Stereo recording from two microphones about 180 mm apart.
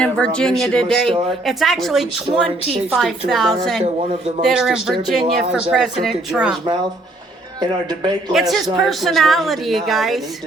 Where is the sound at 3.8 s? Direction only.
35° right (ahead or behind).